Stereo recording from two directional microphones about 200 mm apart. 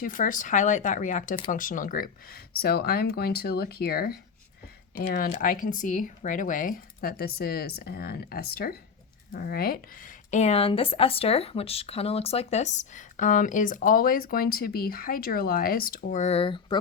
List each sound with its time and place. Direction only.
0.0 s speech: 40° left (ahead or behind); by 16.8 s 25° left (ahead or behind)